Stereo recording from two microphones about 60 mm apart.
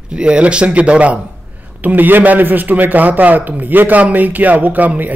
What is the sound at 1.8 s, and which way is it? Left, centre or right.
A man's voice, right.